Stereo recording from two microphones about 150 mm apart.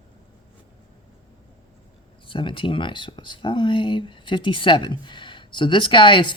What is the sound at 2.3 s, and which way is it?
Speech, 35° left (ahead or behind).